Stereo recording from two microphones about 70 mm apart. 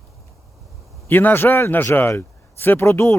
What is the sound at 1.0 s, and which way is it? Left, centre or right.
A man's voice, left.